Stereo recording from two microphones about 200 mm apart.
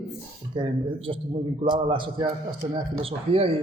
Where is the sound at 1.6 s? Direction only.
25° right (ahead or behind).